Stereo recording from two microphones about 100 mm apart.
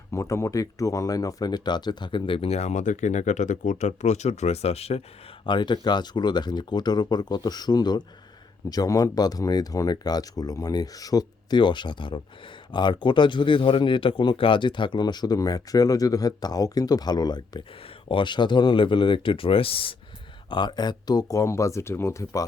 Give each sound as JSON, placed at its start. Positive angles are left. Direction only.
{"t": 0.1, "sound": "speech", "side_deg": 30}
{"t": 4.3, "sound": "speech", "side_deg": 90}
{"t": 5.5, "sound": "a man's voice", "side_deg": 50}
{"t": 20.5, "sound": "speech", "side_deg": 50}